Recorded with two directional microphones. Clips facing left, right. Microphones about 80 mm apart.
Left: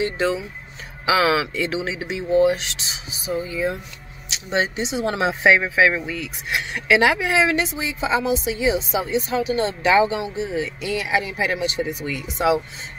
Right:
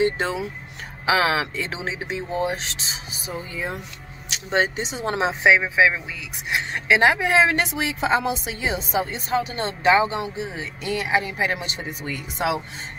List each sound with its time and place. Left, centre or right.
0.0 s speech: right
6.1 s speech: centre
6.7 s speech: right
7.6 s speech: right
8.1 s a woman's voice: right